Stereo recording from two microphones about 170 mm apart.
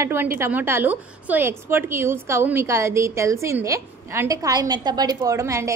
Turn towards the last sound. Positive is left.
turn(degrees=-20)  # may be behind; listen again after turning